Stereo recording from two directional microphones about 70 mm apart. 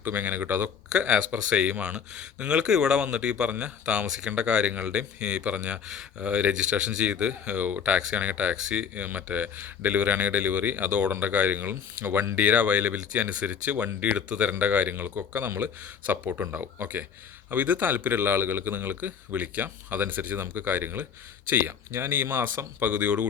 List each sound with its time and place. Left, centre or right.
0.0 s a man's voice: right
0.9 s a man's voice: centre
16.4 s speech: right
16.8 s a man's voice: right